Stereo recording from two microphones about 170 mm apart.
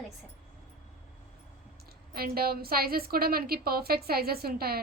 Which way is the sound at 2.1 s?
60° right (ahead or behind).